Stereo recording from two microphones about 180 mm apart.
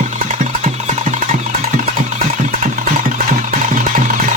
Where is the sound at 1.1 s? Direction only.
45° right (ahead or behind).